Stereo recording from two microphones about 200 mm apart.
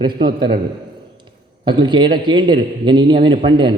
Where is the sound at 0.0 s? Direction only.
25° right (ahead or behind).